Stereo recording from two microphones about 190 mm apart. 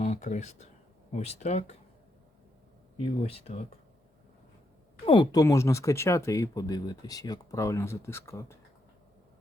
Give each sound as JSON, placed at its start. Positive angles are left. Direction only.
{"t": 0.0, "sound": "speech", "side_deg": 40}
{"t": 3.0, "sound": "speech", "side_deg": 30}
{"t": 5.0, "sound": "speech", "side_deg": 25}